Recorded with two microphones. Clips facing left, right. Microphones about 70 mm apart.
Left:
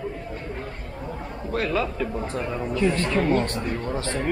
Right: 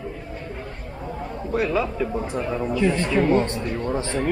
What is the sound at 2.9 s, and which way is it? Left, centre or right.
Speech, centre.